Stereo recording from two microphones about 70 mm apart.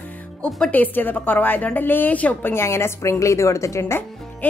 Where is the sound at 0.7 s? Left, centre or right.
Left.